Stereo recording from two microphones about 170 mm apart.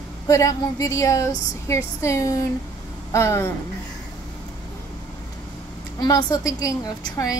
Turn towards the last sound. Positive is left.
turn(degrees=20)  # may be behind; listen again after turning